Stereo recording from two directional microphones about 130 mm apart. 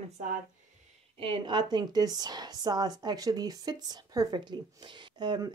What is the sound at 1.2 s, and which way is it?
A woman's voice, 40° right (ahead or behind).